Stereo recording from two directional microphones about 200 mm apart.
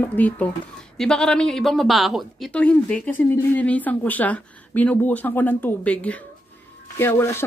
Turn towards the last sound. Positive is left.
turn(degrees=10)  # may be behind; listen again after turning